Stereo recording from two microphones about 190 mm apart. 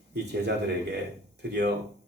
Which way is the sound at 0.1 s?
65° right (ahead or behind).